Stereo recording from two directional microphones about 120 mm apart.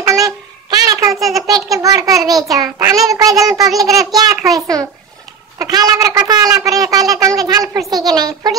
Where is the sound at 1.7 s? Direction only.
30° right (ahead or behind).